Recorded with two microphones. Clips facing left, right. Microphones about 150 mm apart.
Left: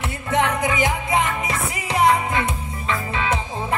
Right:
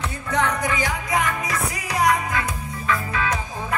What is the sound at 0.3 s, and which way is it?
Music, 25° left (ahead or behind).